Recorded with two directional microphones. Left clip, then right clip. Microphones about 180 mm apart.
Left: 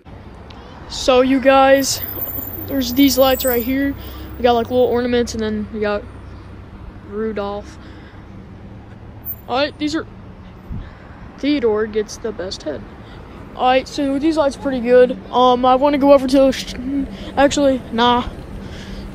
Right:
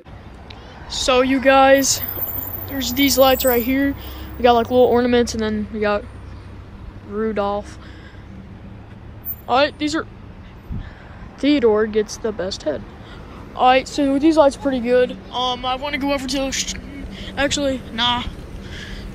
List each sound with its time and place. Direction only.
0.8 s speech: 20° left (ahead or behind)
2.6 s speech: 30° left (ahead or behind)
3.1 s speech: 5° left (ahead or behind)
7.2 s speech: 5° left (ahead or behind)
9.5 s speech: centre (ahead or behind)
11.4 s speech: centre (ahead or behind)
15.0 s speech: 30° left (ahead or behind)
17.4 s speech: 15° left (ahead or behind)
17.9 s a sound: 35° left (ahead or behind)